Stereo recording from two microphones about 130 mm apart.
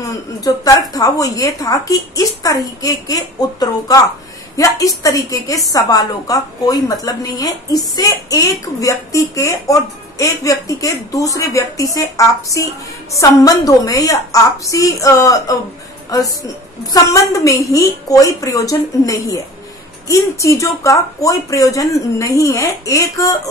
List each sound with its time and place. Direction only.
0.0 s a woman's voice: 30° left (ahead or behind)